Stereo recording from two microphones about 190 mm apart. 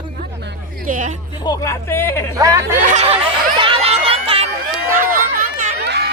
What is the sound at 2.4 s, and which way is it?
Speech, 15° right (ahead or behind).